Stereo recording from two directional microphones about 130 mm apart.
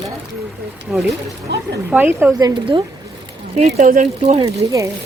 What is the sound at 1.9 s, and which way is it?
Speech, 15° right (ahead or behind).